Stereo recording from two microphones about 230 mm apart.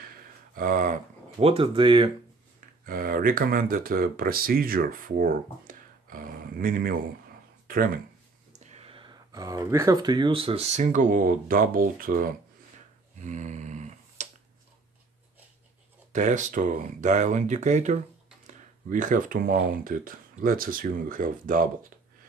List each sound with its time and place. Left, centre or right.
0.6 s speech: right
2.9 s speech: right
8.5 s speech: right
13.2 s a sound: right
16.1 s speech: right